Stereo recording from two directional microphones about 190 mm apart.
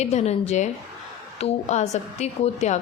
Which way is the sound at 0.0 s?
35° left (ahead or behind).